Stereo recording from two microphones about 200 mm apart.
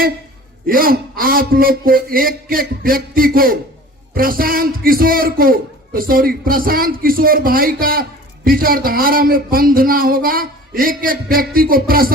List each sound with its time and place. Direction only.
0.7 s a man's voice: 45° right (ahead or behind)